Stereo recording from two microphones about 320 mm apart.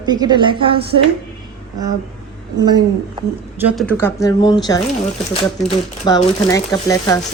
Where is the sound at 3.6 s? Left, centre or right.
Centre.